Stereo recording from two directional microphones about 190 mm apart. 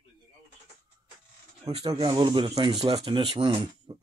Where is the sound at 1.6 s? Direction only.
25° right (ahead or behind).